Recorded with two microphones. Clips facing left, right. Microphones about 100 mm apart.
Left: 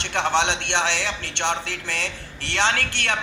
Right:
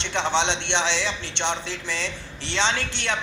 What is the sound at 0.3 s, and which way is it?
A man's voice, 20° right (ahead or behind).